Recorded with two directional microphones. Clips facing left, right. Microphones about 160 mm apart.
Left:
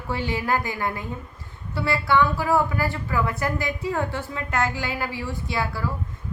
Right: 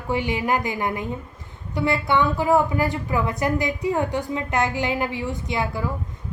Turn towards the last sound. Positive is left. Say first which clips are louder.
# right 2 dB
turn(degrees=-20)  # may be behind; listen again after turning